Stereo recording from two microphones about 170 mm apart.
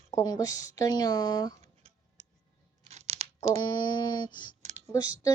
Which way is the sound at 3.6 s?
25° left (ahead or behind).